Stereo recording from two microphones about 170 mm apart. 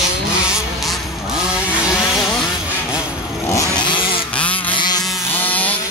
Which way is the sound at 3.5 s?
20° left (ahead or behind).